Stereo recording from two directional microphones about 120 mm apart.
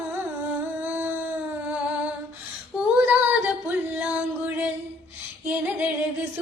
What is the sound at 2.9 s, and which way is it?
Female singing, 15° right (ahead or behind).